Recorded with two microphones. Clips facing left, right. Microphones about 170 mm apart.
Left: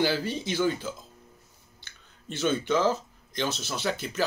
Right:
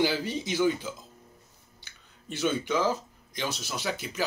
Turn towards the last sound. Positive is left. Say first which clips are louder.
# left 3 dB
turn(degrees=-10)  # may be behind; listen again after turning